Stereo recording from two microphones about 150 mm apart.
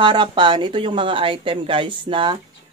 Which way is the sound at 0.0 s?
35° right (ahead or behind).